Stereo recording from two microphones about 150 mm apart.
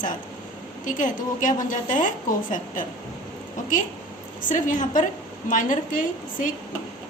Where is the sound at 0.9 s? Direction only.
60° left (ahead or behind).